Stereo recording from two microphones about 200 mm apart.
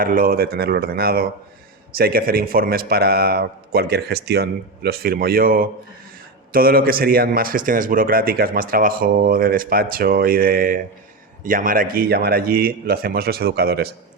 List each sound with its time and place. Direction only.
0.0 s a man's voice: 45° right (ahead or behind)